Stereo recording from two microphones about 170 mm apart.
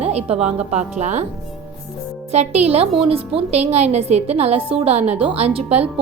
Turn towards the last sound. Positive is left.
turn(degrees=-35)  # may be behind; listen again after turning